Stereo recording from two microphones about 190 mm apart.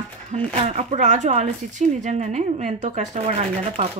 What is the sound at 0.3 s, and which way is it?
Speech, 35° right (ahead or behind).